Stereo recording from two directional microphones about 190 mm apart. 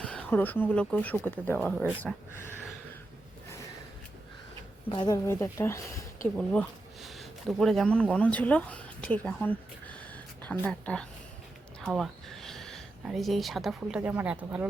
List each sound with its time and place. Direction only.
0.0 s speech: 5° left (ahead or behind)
4.9 s speech: 25° left (ahead or behind); by 14.7 s 5° right (ahead or behind)